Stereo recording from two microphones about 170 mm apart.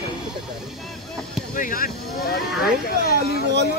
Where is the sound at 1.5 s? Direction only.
55° left (ahead or behind).